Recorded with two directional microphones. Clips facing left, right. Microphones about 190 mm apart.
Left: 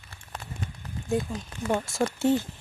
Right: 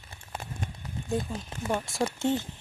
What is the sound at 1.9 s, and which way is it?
Speech, centre (ahead or behind).